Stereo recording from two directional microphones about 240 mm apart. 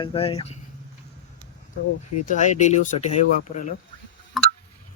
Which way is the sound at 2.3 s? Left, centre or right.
Left.